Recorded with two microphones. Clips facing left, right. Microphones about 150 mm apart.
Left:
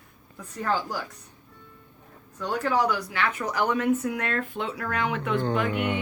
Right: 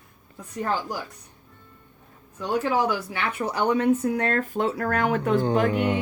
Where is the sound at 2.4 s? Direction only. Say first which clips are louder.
Right 1 dB; 20° right (ahead or behind).